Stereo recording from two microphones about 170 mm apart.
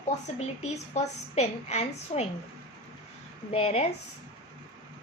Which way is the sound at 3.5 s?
35° left (ahead or behind).